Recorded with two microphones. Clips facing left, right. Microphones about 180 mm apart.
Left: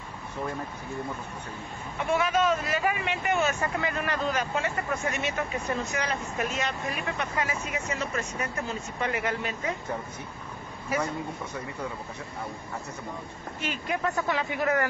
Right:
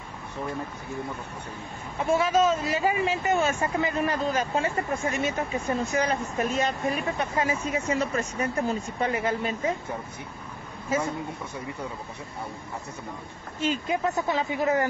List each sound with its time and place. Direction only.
2.0 s speech: 30° right (ahead or behind)
10.9 s speech: 25° right (ahead or behind)
13.6 s speech: 25° right (ahead or behind)